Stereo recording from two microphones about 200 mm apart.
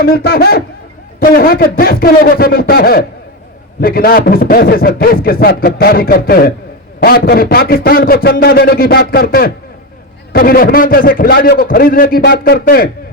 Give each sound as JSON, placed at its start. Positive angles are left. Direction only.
{"t": 0.0, "sound": "a man's voice", "side_deg": 50}